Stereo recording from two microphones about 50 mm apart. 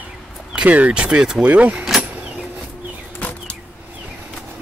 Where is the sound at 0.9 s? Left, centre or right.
Right.